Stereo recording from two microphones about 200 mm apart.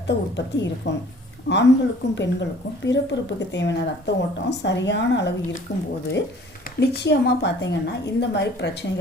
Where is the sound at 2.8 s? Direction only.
60° left (ahead or behind).